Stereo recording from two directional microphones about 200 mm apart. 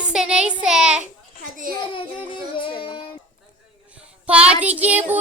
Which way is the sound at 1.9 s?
25° left (ahead or behind).